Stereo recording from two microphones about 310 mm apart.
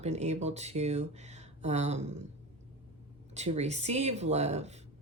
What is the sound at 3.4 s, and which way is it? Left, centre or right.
Speech, right.